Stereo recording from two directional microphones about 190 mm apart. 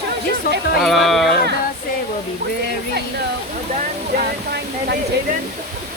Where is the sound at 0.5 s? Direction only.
45° left (ahead or behind).